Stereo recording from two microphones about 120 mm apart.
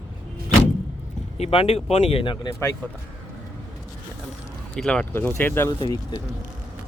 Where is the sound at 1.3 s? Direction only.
60° left (ahead or behind).